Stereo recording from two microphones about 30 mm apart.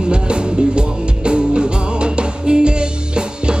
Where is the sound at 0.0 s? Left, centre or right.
Right.